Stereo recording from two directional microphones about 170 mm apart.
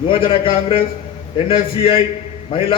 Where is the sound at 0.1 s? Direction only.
30° left (ahead or behind).